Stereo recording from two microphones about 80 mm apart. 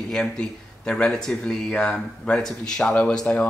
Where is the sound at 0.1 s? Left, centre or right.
Centre.